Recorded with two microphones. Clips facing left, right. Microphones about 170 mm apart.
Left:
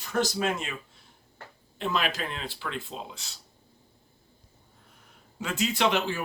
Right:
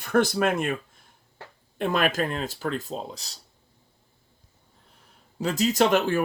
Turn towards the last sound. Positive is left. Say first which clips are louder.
# right 5 dB
turn(degrees=-50)  # may be behind; listen again after turning